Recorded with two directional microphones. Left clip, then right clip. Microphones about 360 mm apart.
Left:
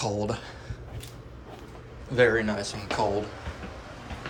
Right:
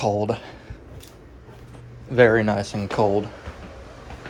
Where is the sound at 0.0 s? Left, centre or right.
Centre.